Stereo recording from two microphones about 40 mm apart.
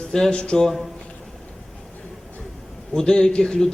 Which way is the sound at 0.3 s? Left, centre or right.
Left.